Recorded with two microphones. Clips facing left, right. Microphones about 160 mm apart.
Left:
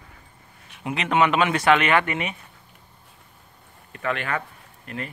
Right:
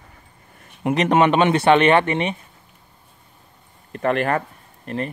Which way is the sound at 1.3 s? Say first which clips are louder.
Right 4 dB; 30° right (ahead or behind).